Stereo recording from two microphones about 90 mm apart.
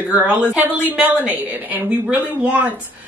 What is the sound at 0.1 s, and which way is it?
Speech, 10° right (ahead or behind).